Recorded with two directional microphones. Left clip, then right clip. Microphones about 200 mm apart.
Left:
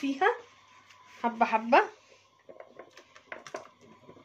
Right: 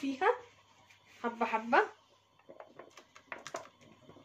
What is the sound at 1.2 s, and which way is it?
Speech, 50° left (ahead or behind).